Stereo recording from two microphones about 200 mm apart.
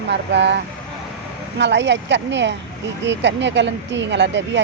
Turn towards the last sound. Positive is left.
turn(degrees=-60)  # may be behind; listen again after turning